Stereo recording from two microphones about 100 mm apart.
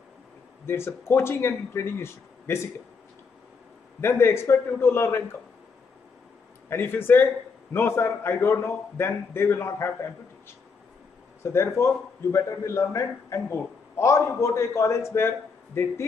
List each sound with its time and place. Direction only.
0.7 s a man's voice: 25° left (ahead or behind)
4.0 s a man's voice: 25° left (ahead or behind)
6.7 s a man's voice: 20° left (ahead or behind)
11.4 s a man's voice: 25° left (ahead or behind)